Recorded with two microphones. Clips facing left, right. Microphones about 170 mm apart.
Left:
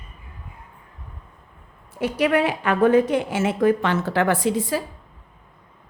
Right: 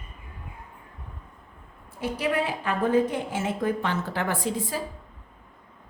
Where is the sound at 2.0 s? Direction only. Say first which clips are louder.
Left 7 dB; 70° left (ahead or behind).